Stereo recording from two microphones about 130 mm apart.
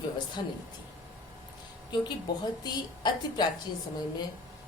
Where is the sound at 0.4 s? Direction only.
35° left (ahead or behind).